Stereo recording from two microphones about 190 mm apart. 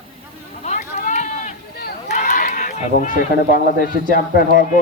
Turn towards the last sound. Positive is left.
turn(degrees=45)  # may be behind; listen again after turning